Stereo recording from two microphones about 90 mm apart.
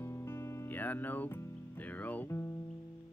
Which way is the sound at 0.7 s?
20° left (ahead or behind).